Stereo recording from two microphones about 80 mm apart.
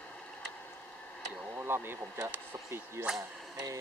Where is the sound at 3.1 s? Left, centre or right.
Right.